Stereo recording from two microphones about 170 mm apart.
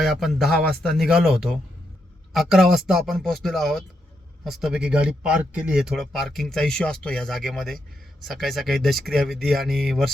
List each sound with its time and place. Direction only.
0.0 s speech: centre (ahead or behind)